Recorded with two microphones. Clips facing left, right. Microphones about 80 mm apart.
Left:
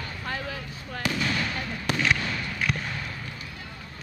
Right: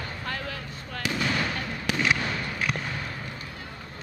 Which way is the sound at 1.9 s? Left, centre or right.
Centre.